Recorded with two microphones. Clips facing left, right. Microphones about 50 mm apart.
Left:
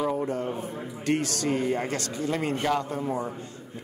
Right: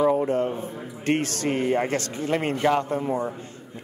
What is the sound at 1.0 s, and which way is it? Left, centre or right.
Speech, right.